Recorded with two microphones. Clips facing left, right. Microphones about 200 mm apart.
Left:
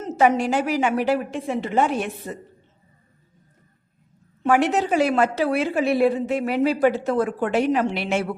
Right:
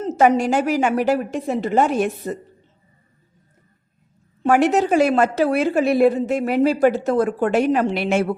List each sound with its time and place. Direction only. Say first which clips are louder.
0.2 s a woman's voice: right 2 dB; 45° right (ahead or behind)
4.4 s a woman's voice: right 3 dB; 45° right (ahead or behind)